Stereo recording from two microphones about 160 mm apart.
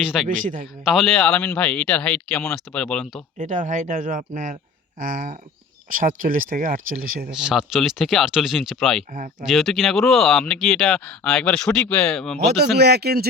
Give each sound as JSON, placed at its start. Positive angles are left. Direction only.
{"t": 0.0, "sound": "speech", "side_deg": -5}
{"t": 0.3, "sound": "speech", "side_deg": -55}
{"t": 0.9, "sound": "speech", "side_deg": 0}
{"t": 3.3, "sound": "speech", "side_deg": -55}
{"t": 7.3, "sound": "speech", "side_deg": -5}
{"t": 12.7, "sound": "speech", "side_deg": -90}